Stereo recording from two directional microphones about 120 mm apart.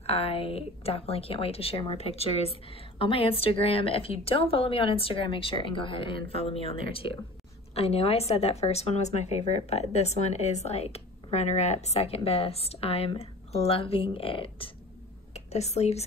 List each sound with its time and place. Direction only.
0.0 s a woman's voice: 55° left (ahead or behind)
15.3 s speech: 65° left (ahead or behind)